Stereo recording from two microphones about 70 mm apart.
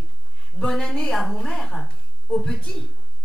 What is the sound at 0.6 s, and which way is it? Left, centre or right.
Speech, centre.